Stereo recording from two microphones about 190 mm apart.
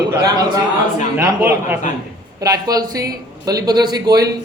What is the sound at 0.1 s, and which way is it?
A man's voice, 20° right (ahead or behind).